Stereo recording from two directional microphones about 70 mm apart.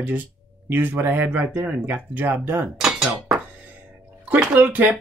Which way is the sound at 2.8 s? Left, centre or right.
Centre.